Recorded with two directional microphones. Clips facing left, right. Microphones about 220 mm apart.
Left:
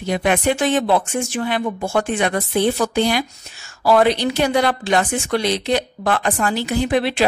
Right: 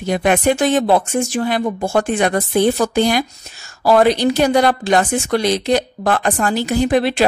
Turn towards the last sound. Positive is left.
turn(degrees=-40)  # may be behind; listen again after turning